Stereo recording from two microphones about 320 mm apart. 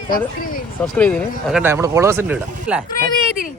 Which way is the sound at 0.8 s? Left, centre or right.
Centre.